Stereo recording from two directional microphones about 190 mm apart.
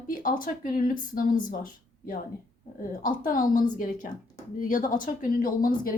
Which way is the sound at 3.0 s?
45° left (ahead or behind).